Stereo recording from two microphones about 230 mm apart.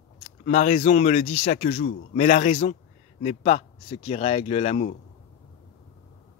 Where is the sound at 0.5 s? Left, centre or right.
Left.